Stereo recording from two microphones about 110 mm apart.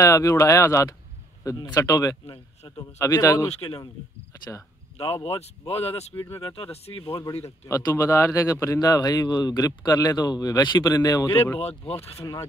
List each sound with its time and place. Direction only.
0.0 s speech: 30° left (ahead or behind)
5.1 s speech: 60° left (ahead or behind)
6.1 s speech: 20° left (ahead or behind)
6.4 s speech: 55° left (ahead or behind)
7.4 s speech: 30° left (ahead or behind)
11.3 s speech: 20° left (ahead or behind)